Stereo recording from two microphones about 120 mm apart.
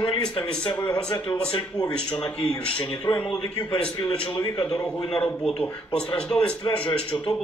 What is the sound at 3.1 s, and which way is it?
A man's voice, 5° left (ahead or behind).